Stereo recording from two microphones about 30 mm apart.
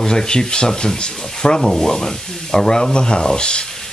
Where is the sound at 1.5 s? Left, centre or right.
Centre; by 3.6 s left.